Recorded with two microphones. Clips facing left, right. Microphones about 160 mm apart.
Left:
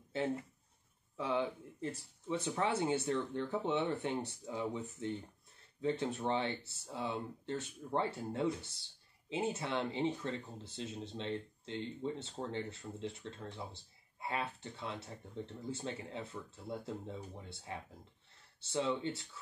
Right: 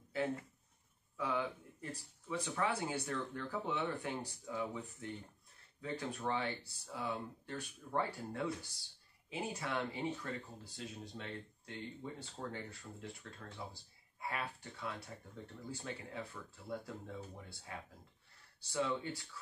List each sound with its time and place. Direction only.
0.1 s speech: 25° left (ahead or behind)